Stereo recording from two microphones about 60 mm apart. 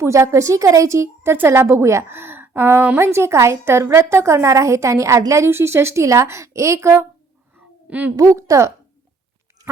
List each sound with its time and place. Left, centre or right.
0.0 s a woman's voice: right
7.9 s a woman's voice: right
8.1 s a woman's voice: right